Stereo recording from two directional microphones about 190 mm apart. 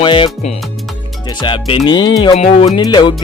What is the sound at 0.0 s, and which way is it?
Music, 25° left (ahead or behind).